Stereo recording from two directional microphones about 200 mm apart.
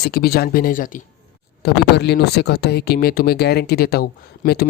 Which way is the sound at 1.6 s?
55° left (ahead or behind).